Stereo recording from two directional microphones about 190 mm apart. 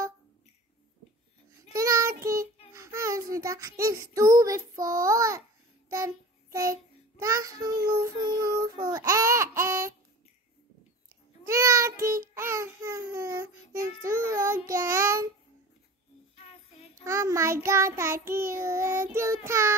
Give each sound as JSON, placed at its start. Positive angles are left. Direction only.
{"t": 1.7, "sound": "child singing", "side_deg": -15}
{"t": 11.4, "sound": "child singing", "side_deg": -15}
{"t": 17.0, "sound": "child singing", "side_deg": -15}